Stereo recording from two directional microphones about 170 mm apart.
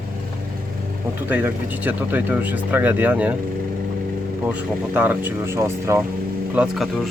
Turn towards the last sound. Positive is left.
turn(degrees=-5)  # may be behind; listen again after turning